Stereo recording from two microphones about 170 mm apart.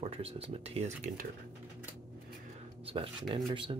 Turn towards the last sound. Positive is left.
turn(degrees=-30)  # may be behind; listen again after turning